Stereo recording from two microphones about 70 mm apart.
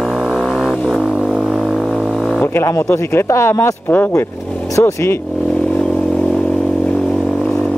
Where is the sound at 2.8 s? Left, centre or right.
Left.